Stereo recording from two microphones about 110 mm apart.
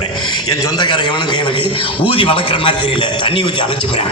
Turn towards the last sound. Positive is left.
turn(degrees=50)  # may be behind; listen again after turning